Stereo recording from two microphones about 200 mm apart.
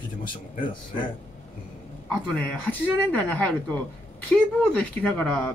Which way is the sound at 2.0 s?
5° left (ahead or behind).